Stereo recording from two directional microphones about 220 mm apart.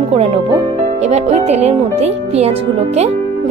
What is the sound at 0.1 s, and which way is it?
Speech, 25° right (ahead or behind).